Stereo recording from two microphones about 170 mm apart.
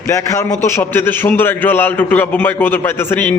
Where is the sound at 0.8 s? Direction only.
15° left (ahead or behind).